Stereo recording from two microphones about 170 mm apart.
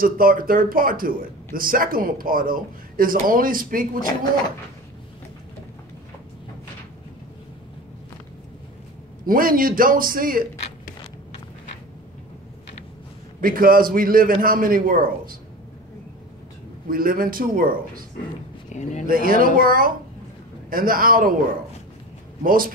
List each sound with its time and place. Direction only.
0.0 s a man's voice: 55° right (ahead or behind)
9.2 s a man's voice: 55° right (ahead or behind)
13.4 s a man's voice: 55° right (ahead or behind)
16.8 s a man's voice: 55° right (ahead or behind)
18.7 s speech: 45° left (ahead or behind)
19.0 s a man's voice: 55° right (ahead or behind)
22.4 s a man's voice: 55° right (ahead or behind)